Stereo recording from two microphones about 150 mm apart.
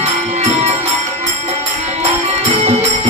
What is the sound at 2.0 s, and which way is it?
Music, 45° right (ahead or behind).